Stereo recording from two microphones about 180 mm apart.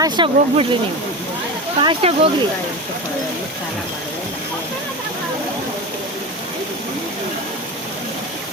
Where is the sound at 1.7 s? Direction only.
30° right (ahead or behind).